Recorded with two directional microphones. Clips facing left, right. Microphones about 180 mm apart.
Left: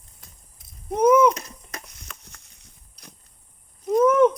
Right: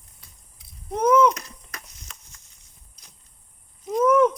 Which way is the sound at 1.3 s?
25° left (ahead or behind).